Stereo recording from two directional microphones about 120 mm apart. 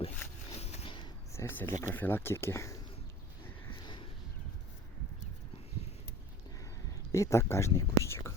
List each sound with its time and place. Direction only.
0.5 s a sound: 50° left (ahead or behind)
1.3 s speech: 20° left (ahead or behind)
7.1 s speech: 25° left (ahead or behind)